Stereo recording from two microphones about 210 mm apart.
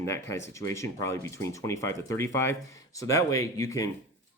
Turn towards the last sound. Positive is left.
turn(degrees=15)  # may be behind; listen again after turning